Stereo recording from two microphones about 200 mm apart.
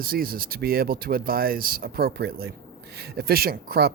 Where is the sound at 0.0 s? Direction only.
50° right (ahead or behind).